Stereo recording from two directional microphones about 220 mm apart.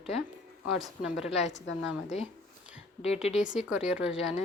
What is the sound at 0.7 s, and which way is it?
Speech, 5° right (ahead or behind).